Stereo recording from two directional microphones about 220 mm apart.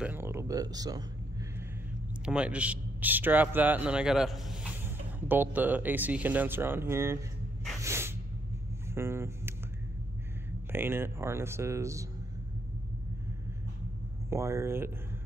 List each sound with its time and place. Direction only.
0.0 s speech: 10° right (ahead or behind)
2.2 s a man's voice: 5° right (ahead or behind)
7.8 s snort: 10° right (ahead or behind)
8.9 s speech: 10° right (ahead or behind)
10.7 s speech: 10° right (ahead or behind)
14.3 s speech: 10° right (ahead or behind)